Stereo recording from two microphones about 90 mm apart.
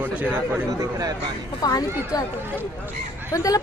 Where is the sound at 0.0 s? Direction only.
15° right (ahead or behind).